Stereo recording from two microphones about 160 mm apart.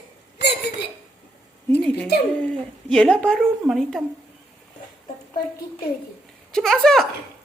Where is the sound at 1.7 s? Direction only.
5° left (ahead or behind).